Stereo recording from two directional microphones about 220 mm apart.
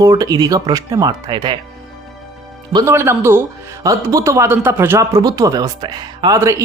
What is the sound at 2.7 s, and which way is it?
Speech, 15° right (ahead or behind).